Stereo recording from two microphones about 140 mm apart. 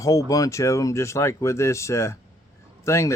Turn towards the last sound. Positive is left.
turn(degrees=20)  # may be behind; listen again after turning